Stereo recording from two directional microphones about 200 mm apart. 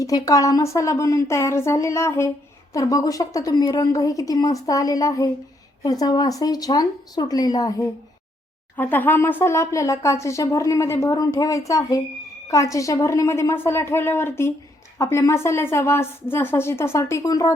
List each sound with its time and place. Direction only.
0.0 s speech: 15° left (ahead or behind)